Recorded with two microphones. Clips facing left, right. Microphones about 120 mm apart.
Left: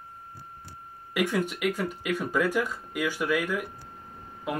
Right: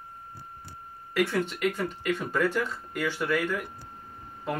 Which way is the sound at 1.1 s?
10° left (ahead or behind).